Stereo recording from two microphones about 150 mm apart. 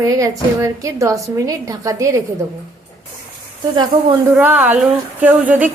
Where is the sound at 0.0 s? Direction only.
20° right (ahead or behind).